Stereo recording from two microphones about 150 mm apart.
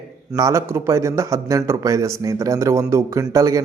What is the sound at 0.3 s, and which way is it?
A man's voice, 20° right (ahead or behind).